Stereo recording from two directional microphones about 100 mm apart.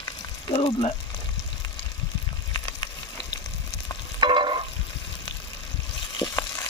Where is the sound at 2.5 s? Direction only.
40° left (ahead or behind).